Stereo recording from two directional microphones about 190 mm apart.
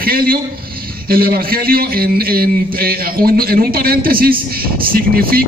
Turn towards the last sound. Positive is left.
turn(degrees=-50)  # may be behind; listen again after turning